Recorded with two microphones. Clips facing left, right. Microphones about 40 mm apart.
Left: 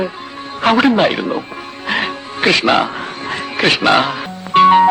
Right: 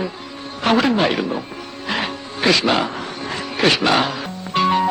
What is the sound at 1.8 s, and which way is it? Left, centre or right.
Music, left.